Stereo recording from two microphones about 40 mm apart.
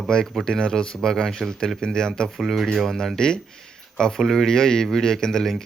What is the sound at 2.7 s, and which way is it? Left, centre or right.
Speech, centre.